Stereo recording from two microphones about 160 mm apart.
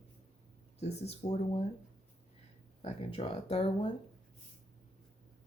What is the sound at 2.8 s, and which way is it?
Speech, 40° left (ahead or behind).